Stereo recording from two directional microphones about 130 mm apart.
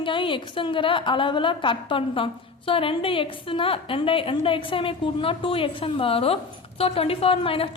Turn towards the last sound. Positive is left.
turn(degrees=45)  # may be behind; listen again after turning